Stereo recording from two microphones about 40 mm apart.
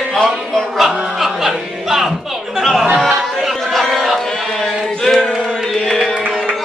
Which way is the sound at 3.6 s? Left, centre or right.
Centre.